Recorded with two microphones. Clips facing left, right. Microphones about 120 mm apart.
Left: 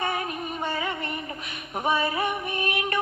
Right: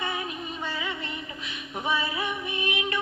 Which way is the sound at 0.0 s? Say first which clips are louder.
Left 4 dB; 50° left (ahead or behind).